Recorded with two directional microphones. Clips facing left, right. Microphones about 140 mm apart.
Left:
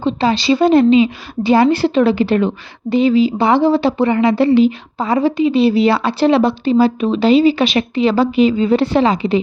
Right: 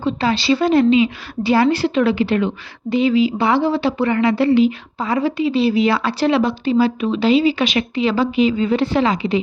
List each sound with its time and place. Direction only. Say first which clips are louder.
0.0 s a woman's voice: left 3 dB; 20° left (ahead or behind)